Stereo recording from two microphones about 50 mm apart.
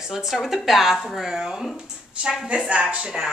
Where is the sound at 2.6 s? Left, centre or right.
Centre.